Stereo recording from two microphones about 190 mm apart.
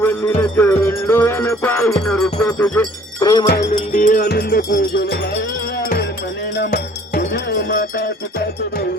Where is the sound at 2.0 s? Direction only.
5° left (ahead or behind).